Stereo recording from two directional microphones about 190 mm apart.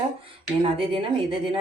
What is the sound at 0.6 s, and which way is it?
Speech, 30° right (ahead or behind).